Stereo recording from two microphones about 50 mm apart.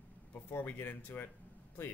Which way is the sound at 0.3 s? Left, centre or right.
Left.